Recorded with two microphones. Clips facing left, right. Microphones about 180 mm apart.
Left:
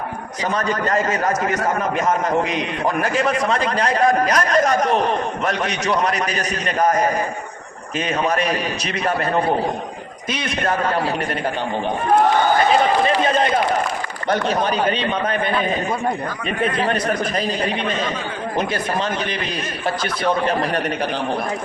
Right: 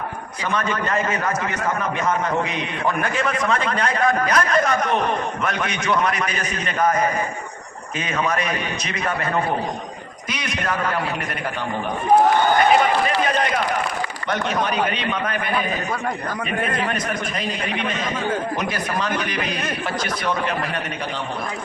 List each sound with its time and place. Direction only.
0.5 s a man's voice: 40° left (ahead or behind)
10.3 s a man's voice: 30° left (ahead or behind)
13.1 s a sound: 30° left (ahead or behind)
14.3 s a man's voice: 35° left (ahead or behind)
16.7 s a man's voice: 35° left (ahead or behind)
20.2 s a man's voice: 35° left (ahead or behind)